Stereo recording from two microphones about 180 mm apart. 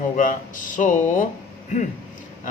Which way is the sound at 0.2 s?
50° left (ahead or behind).